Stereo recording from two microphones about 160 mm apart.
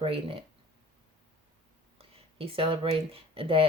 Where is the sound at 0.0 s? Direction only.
35° right (ahead or behind).